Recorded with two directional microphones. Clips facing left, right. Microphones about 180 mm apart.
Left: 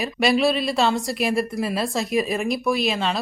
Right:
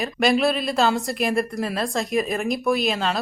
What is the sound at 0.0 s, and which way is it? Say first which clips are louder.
Speech: even; centre (ahead or behind).